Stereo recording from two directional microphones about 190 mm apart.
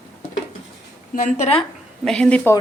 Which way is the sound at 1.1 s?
40° left (ahead or behind).